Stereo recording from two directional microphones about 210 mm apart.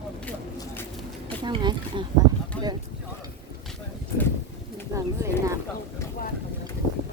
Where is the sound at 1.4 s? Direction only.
20° right (ahead or behind).